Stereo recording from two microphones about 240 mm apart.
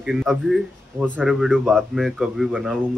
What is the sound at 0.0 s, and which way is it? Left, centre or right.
Speech, centre.